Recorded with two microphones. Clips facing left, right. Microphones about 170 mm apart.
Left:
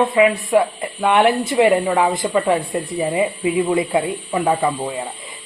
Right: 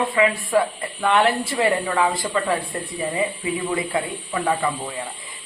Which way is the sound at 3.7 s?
20° left (ahead or behind).